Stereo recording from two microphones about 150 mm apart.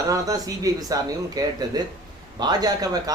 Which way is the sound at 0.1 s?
25° right (ahead or behind).